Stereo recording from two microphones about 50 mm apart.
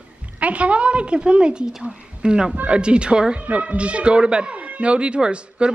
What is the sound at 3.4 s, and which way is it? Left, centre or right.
Speech, right.